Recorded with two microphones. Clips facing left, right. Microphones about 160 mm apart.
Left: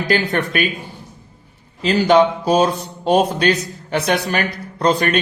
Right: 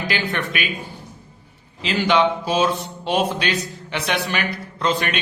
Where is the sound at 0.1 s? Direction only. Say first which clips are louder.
Left 9 dB; 40° left (ahead or behind).